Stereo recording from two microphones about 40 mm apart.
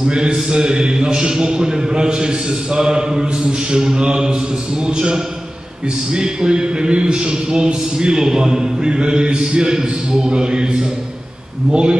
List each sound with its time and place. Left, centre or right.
0.0 s speech: right